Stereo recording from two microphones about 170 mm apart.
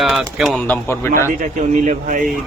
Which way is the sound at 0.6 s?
10° left (ahead or behind).